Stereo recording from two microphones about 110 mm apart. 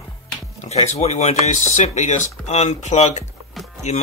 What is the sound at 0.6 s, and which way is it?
Speech, 85° left.